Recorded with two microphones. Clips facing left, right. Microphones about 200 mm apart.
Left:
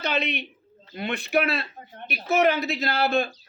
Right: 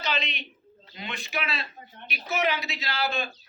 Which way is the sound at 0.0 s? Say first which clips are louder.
Left 5 dB; 60° left (ahead or behind).